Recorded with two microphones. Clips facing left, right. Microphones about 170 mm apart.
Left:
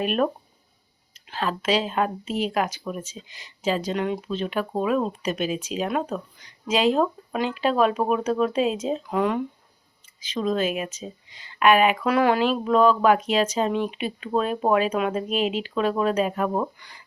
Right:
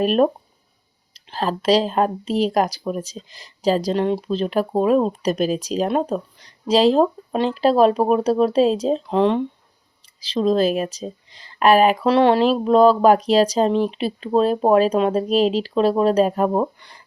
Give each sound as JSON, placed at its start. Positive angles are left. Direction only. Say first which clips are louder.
{"t": 0.0, "sound": "speech", "louder": "right 6 dB", "side_deg": -35}